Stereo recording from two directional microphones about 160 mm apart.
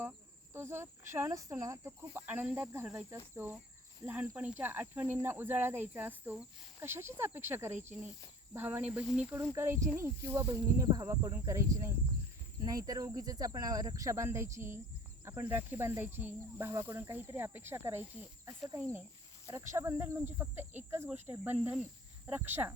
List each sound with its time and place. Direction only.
0.5 s speech: 15° right (ahead or behind)
9.3 s speech: 15° right (ahead or behind)